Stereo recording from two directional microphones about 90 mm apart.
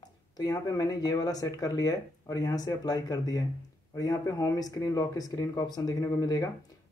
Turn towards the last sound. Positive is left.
turn(degrees=45)  # may be behind; listen again after turning